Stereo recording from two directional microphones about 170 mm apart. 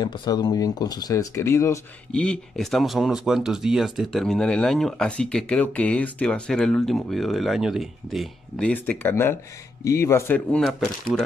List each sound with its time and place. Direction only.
0.0 s speech: 25° left (ahead or behind)
2.1 s speech: 5° left (ahead or behind)